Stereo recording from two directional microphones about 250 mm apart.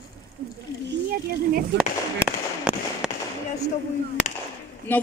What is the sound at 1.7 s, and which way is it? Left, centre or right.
Speech, right.